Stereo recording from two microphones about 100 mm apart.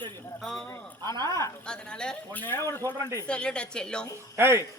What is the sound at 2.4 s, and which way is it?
Speech, 25° left (ahead or behind).